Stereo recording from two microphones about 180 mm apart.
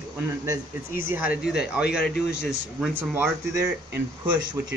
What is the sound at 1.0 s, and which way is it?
A man's voice, 10° right (ahead or behind).